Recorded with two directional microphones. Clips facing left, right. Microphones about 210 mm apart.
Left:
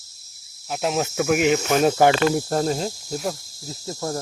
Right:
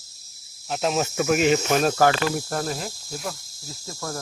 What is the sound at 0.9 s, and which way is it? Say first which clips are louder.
Cricket: left 2 dB; 15° left (ahead or behind).